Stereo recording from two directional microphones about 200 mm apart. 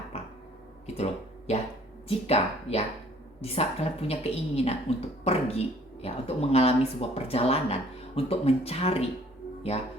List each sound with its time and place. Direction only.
0.9 s speech: 30° left (ahead or behind)